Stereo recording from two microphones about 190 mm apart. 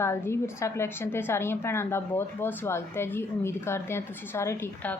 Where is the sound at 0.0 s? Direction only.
15° left (ahead or behind).